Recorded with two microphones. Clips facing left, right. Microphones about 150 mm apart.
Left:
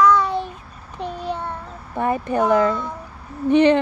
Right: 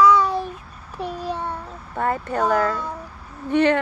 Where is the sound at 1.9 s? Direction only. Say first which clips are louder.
Left 3 dB; 15° left (ahead or behind).